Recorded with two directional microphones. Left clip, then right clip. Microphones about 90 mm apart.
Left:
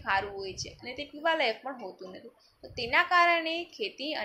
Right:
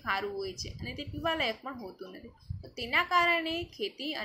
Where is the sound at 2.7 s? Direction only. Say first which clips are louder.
Left 2 dB; 35° right (ahead or behind).